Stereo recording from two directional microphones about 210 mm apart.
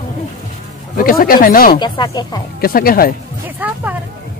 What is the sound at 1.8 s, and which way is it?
Speech, 20° left (ahead or behind).